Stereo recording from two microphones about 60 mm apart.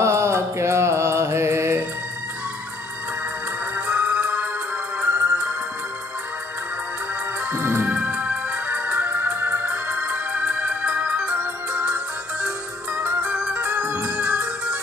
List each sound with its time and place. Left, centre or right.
0.0 s music: right
3.7 s music: right
7.5 s music: right
7.8 s music: right